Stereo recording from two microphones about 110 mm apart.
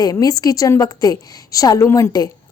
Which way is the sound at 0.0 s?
35° left (ahead or behind).